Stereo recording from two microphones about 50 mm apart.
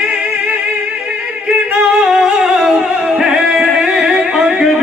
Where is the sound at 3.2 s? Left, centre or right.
Centre.